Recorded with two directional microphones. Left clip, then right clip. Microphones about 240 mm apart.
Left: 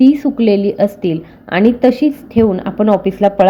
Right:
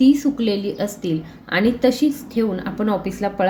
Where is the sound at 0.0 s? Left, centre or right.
Left.